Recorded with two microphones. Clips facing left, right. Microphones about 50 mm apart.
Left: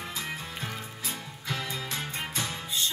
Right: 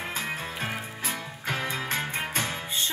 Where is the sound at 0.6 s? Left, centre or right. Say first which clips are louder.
Right 5 dB; right.